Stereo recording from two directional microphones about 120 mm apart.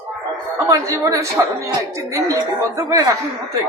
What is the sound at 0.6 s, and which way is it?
Speech, 25° right (ahead or behind).